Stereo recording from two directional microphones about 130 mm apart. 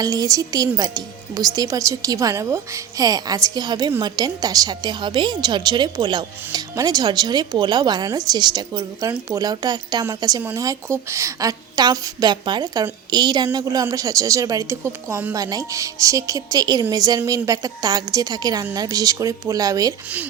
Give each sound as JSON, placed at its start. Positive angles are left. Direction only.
{"t": 0.0, "sound": "a woman's voice", "side_deg": -30}